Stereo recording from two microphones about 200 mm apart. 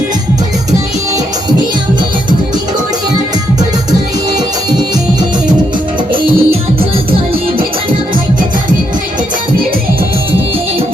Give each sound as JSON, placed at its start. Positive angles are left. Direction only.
{"t": 6.1, "sound": "music", "side_deg": -25}